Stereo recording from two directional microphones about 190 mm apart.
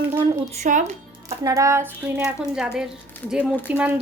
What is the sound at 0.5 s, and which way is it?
Speech, 40° right (ahead or behind).